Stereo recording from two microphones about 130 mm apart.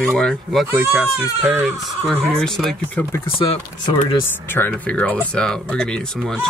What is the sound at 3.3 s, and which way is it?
Speech, 45° left (ahead or behind).